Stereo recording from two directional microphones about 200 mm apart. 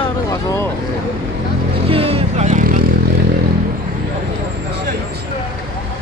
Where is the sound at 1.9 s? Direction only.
30° right (ahead or behind).